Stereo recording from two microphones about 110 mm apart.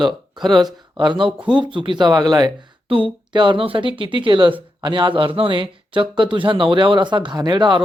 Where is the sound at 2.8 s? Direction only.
50° right (ahead or behind).